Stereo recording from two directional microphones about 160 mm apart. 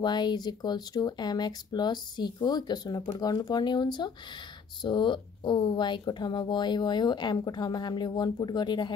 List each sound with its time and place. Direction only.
0.0 s speech: 25° left (ahead or behind)